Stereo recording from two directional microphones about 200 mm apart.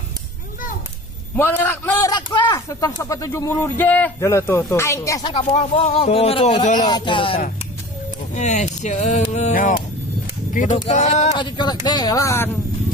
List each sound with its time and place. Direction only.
1.3 s a man's voice: 10° left (ahead or behind)
5.3 s speech: 30° left (ahead or behind)
6.8 s speech: 20° left (ahead or behind)
8.4 s speech: 35° left (ahead or behind)
11.4 s speech: 20° left (ahead or behind)